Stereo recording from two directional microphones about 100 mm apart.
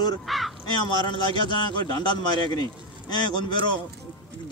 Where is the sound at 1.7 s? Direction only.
50° left (ahead or behind).